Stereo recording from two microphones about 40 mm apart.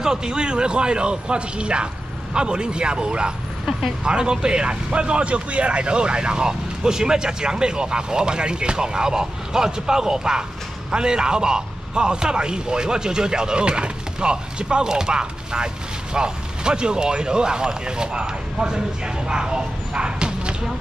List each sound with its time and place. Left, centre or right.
0.0 s a man's voice: centre